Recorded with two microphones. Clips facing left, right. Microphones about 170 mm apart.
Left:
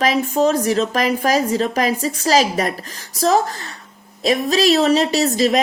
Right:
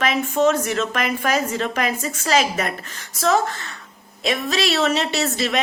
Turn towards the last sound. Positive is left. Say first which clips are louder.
# left 6 dB
turn(degrees=35)  # may be behind; listen again after turning